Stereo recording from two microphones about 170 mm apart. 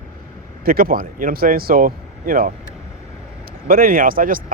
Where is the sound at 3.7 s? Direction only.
60° right (ahead or behind).